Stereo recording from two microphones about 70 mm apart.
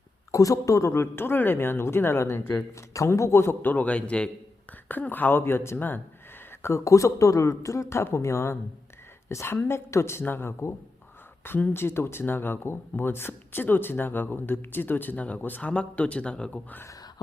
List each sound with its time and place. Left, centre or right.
0.3 s speech: left
2.9 s speech: left; by 16.6 s centre